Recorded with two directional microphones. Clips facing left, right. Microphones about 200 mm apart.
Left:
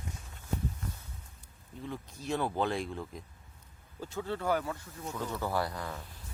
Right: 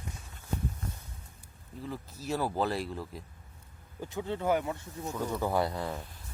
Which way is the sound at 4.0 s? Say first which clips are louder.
Right 2 dB; 15° right (ahead or behind).